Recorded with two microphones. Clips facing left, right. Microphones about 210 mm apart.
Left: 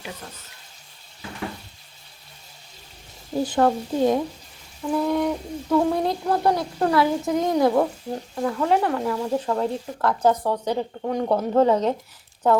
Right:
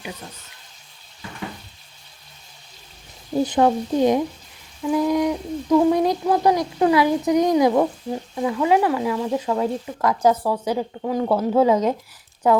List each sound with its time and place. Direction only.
3.4 s speech: 20° right (ahead or behind)
7.6 s speech: 5° right (ahead or behind)